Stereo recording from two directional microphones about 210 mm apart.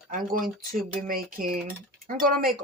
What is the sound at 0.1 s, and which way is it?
Speech, 40° right (ahead or behind).